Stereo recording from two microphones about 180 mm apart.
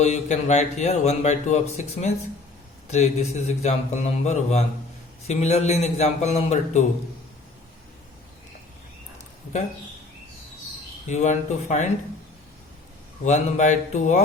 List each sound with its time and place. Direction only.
0.0 s a man's voice: 40° left (ahead or behind)
11.0 s a man's voice: 40° left (ahead or behind)
13.2 s a man's voice: 40° left (ahead or behind)